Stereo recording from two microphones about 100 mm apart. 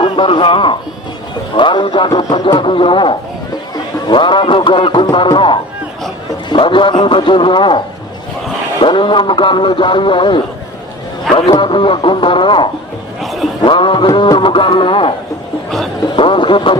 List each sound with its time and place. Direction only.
0.0 s a man's voice: 55° left (ahead or behind)
8.8 s speech: 55° left (ahead or behind)
11.3 s a man's voice: centre (ahead or behind)
11.6 s speech: 55° left (ahead or behind)
13.2 s music: centre (ahead or behind)
13.7 s speech: 55° left (ahead or behind)